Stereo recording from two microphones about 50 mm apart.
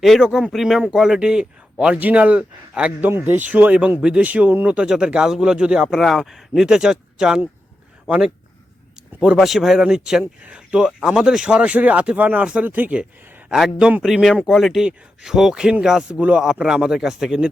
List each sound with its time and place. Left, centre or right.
0.0 s a man's voice: centre
2.0 s speech: right
3.0 s speech: right
4.7 s speech: centre
5.8 s speech: centre
6.6 s a man's voice: centre
9.4 s a man's voice: centre; by 12.6 s right
12.6 s speech: right
13.5 s a man's voice: centre
14.0 s a man's voice: centre